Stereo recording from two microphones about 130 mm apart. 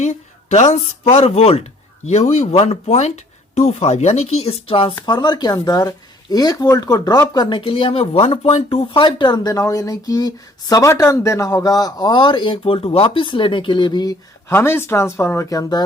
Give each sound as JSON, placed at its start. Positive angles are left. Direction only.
{"t": 0.0, "sound": "speech", "side_deg": 65}
{"t": 7.3, "sound": "speech", "side_deg": 40}
{"t": 8.9, "sound": "speech", "side_deg": 40}
{"t": 14.5, "sound": "speech", "side_deg": 20}